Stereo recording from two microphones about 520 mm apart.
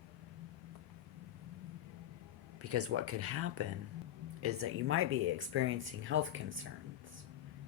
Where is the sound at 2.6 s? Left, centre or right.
Right.